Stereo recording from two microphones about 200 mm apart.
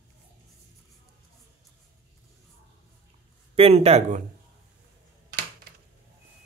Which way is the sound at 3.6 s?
30° right (ahead or behind).